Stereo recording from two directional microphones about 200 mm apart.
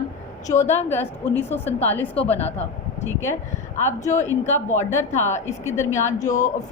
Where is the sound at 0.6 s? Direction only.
10° left (ahead or behind).